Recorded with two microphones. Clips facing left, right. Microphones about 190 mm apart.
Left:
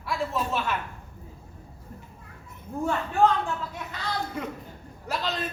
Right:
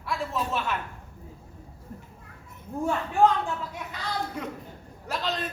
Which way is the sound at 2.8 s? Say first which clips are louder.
Right 1 dB; 15° right (ahead or behind).